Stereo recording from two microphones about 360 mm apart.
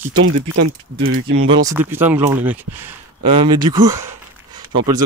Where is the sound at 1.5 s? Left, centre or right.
Centre.